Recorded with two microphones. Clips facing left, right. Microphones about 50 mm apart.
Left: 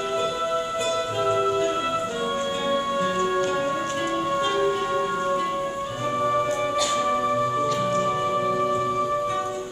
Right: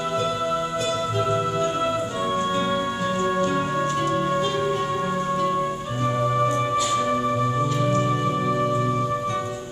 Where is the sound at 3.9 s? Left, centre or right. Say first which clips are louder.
Right 2 dB; centre.